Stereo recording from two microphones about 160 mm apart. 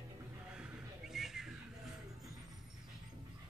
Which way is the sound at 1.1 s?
Centre (ahead or behind).